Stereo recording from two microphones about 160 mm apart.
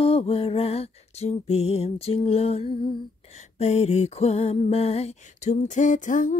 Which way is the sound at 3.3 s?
45° left (ahead or behind).